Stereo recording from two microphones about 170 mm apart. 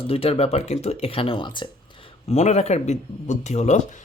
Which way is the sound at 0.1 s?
35° left (ahead or behind).